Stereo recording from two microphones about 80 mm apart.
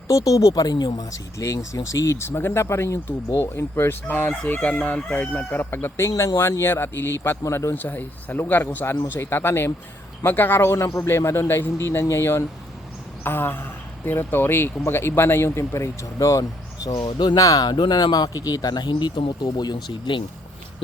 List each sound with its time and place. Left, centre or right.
0.1 s speech: left; by 5.6 s centre
5.7 s speech: left
17.1 s speech: left
17.7 s speech: left